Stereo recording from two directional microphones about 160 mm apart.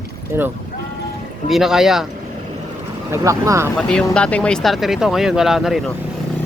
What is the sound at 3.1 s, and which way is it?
Speech, 20° right (ahead or behind).